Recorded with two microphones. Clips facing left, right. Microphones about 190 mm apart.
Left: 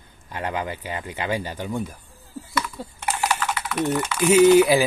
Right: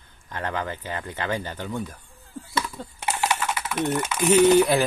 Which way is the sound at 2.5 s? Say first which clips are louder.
Left 1 dB; 25° right (ahead or behind).